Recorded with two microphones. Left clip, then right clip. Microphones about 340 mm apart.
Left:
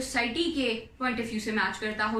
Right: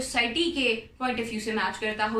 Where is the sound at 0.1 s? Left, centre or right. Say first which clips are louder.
Right 3 dB; centre.